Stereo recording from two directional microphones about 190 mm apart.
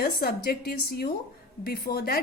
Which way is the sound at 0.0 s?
50° left (ahead or behind).